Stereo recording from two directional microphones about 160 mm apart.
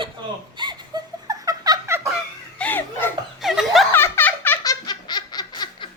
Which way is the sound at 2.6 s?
10° left (ahead or behind).